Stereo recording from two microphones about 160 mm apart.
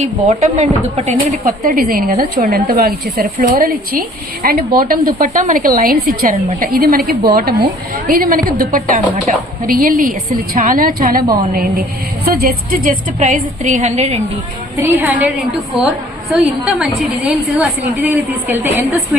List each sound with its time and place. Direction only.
0.0 s a woman's voice: 45° right (ahead or behind)
1.6 s a woman's voice: 60° right (ahead or behind)
8.0 s a woman's voice: 60° right (ahead or behind); by 14.2 s 40° right (ahead or behind)
14.8 s a woman's voice: 15° right (ahead or behind)
16.3 s a woman's voice: centre (ahead or behind)